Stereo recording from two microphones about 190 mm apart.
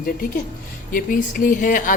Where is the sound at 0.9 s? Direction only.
45° left (ahead or behind).